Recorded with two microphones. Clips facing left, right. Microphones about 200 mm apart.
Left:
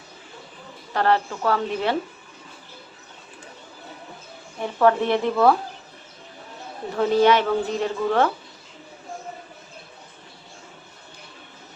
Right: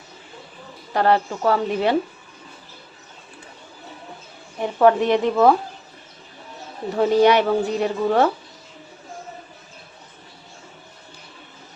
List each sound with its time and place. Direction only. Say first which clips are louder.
0.9 s a woman's voice: right 2 dB; 15° right (ahead or behind)
4.8 s a woman's voice: right 3 dB; 15° right (ahead or behind)
6.9 s a woman's voice: right 2 dB; 15° right (ahead or behind)